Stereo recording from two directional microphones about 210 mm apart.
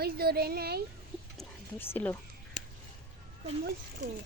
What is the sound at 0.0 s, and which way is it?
Speech, 45° right (ahead or behind).